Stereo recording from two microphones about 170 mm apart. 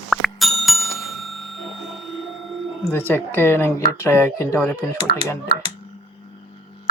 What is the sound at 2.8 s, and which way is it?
Speech, 10° left (ahead or behind).